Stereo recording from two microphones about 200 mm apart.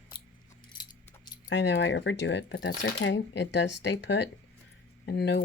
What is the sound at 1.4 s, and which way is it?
A woman's voice, 70° left (ahead or behind).